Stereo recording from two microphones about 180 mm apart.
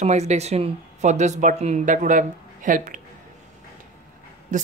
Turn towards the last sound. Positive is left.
turn(degrees=-45)  # may be behind; listen again after turning